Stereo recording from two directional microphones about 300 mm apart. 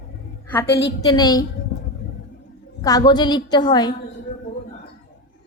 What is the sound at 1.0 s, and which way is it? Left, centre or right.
Speech, centre.